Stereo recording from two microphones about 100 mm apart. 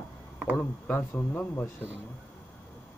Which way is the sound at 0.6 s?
20° left (ahead or behind).